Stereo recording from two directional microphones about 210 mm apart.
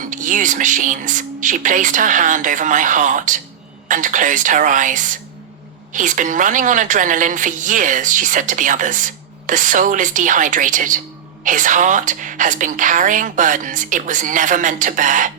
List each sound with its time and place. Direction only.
0.1 s a woman's voice: 40° right (ahead or behind)